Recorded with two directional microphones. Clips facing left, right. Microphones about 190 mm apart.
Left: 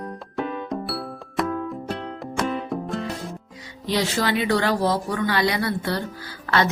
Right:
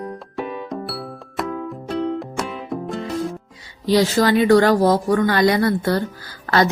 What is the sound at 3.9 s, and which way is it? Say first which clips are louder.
Speech: right 7 dB; 40° right (ahead or behind).